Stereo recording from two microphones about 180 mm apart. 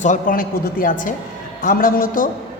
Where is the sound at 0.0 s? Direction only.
45° left (ahead or behind).